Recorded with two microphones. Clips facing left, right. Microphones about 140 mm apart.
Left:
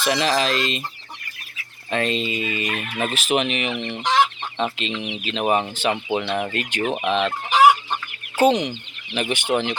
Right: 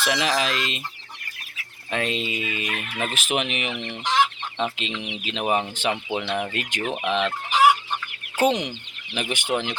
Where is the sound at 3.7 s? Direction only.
20° left (ahead or behind).